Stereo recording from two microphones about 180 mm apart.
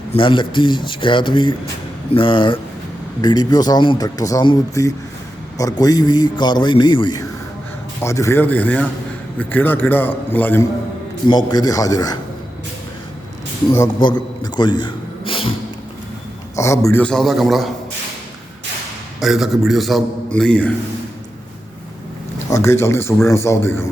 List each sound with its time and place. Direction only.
0.1 s a man's voice: 25° left (ahead or behind); by 10.7 s 10° left (ahead or behind)
11.3 s speech: 25° left (ahead or behind)
13.7 s a sound: 20° left (ahead or behind)
16.6 s a man's voice: 15° left (ahead or behind); by 17.7 s centre (ahead or behind)
19.2 s a man's voice: centre (ahead or behind)
22.4 s a man's voice: 15° left (ahead or behind)